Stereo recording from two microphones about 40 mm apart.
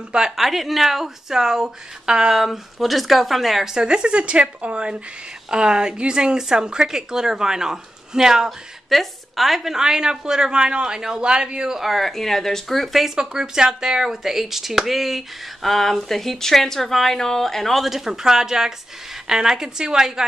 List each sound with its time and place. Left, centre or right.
0.4 s a woman's voice: centre
2.4 s speech: centre
3.7 s a woman's voice: right
8.9 s a woman's voice: centre
11.8 s speech: centre
13.0 s a woman's voice: centre
15.6 s speech: centre
17.8 s a woman's voice: centre